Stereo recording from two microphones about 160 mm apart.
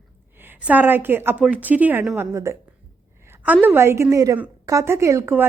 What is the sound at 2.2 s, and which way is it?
Speech, 15° right (ahead or behind).